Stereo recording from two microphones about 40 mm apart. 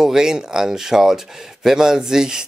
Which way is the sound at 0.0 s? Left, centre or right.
Centre.